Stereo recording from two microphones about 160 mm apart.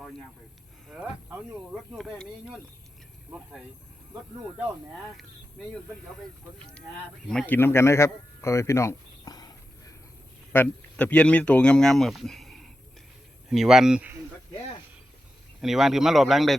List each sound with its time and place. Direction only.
0.9 s speech: 5° right (ahead or behind)
5.1 s speech: centre (ahead or behind)
7.3 s speech: 5° left (ahead or behind); by 9.9 s 25° left (ahead or behind)
10.5 s speech: 10° left (ahead or behind); by 14.2 s 10° right (ahead or behind)
15.6 s speech: centre (ahead or behind)